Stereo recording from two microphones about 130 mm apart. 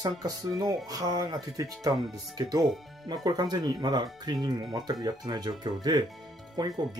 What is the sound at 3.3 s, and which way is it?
Speech, 30° right (ahead or behind).